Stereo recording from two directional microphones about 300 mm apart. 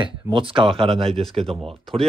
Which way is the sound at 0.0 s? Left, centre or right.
Centre.